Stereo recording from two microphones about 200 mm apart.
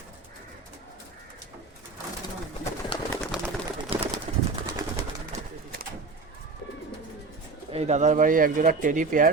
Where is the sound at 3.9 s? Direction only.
25° right (ahead or behind).